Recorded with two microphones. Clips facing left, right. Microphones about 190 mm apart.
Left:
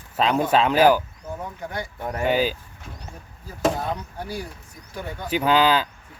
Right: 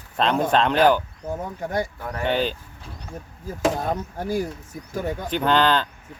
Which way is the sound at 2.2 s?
5° left (ahead or behind).